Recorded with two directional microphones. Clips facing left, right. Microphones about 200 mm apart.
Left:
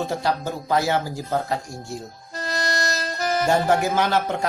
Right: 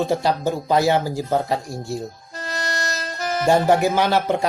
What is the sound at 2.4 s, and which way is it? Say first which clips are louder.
Music: left 2 dB; 40° left (ahead or behind).